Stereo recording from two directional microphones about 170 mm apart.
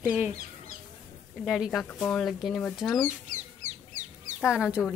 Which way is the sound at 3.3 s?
45° right (ahead or behind).